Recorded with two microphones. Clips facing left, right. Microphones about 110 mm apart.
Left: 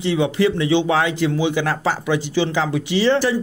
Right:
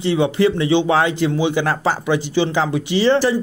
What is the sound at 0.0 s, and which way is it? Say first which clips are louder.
Speech: right 2 dB; 35° right (ahead or behind).